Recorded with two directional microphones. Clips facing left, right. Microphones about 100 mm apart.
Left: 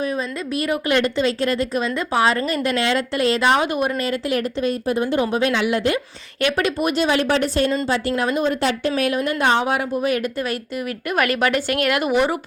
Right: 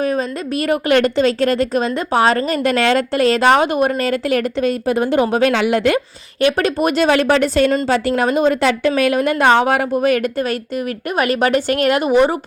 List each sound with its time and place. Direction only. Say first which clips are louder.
0.7 s a woman's voice: right 6 dB; 55° right (ahead or behind)
1.8 s speech: right 4 dB; 45° right (ahead or behind)
4.6 s a woman's voice: right 4 dB; 75° right (ahead or behind)
6.4 s a woman's voice: right 5 dB; 40° right (ahead or behind)
6.8 s a woman's voice: right 6 dB; 65° right (ahead or behind); by 8.9 s 90° right
8.9 s a woman's voice: right 5 dB; 75° right (ahead or behind)
11.1 s a woman's voice: right 3 dB; 25° right (ahead or behind)